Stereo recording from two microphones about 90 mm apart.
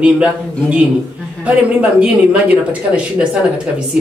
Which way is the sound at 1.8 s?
15° right (ahead or behind).